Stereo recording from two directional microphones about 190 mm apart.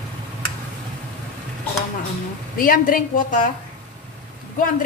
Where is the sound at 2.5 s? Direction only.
45° left (ahead or behind).